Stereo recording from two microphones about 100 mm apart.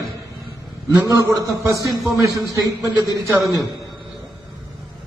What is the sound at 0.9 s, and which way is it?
A man's voice, 35° right (ahead or behind).